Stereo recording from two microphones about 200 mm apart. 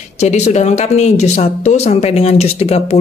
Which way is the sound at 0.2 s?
35° left (ahead or behind).